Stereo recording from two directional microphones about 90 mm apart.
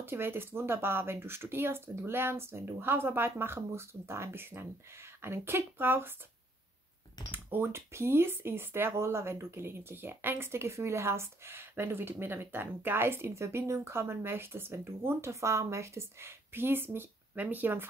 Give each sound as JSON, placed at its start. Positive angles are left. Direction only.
{"t": 0.0, "sound": "speech", "side_deg": -25}
{"t": 7.2, "sound": "speech", "side_deg": -20}